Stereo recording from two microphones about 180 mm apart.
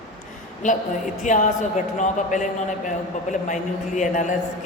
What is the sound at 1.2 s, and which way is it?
Speech, 45° left (ahead or behind).